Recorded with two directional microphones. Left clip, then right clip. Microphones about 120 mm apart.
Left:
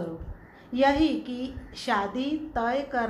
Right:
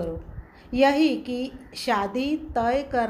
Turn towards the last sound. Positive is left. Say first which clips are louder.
# right 4 dB
turn(degrees=-55)  # may be behind; listen again after turning